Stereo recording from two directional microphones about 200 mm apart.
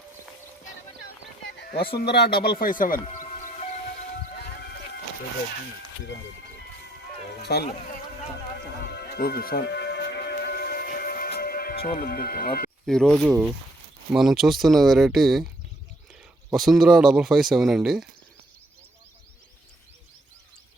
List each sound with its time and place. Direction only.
1.5 s a sound: 55° left (ahead or behind)
2.0 s speech: 55° left (ahead or behind)
4.4 s music: 55° left (ahead or behind)
7.5 s speech: 55° left (ahead or behind)
8.9 s music: 55° left (ahead or behind)
12.8 s speech: 5° left (ahead or behind)
16.5 s speech: centre (ahead or behind)